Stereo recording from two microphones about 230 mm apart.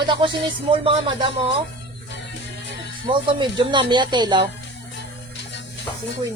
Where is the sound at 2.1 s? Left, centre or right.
Left.